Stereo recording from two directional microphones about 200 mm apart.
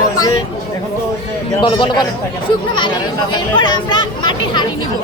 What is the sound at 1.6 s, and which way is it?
Speech, 20° left (ahead or behind).